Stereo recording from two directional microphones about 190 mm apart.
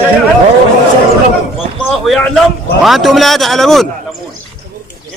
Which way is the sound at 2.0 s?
Centre (ahead or behind).